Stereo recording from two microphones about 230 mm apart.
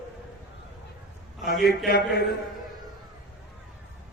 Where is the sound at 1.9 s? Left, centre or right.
Left.